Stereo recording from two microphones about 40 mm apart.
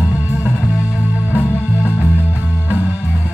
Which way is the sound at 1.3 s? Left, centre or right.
Left.